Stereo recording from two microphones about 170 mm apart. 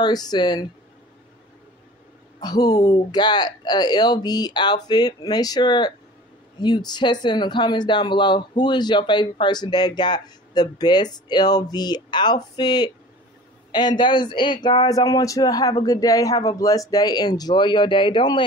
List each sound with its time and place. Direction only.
0.0 s speech: 25° left (ahead or behind)
2.4 s speech: 20° left (ahead or behind)